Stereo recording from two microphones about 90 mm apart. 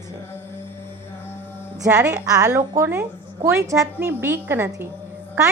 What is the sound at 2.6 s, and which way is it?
A woman's voice, 25° right (ahead or behind).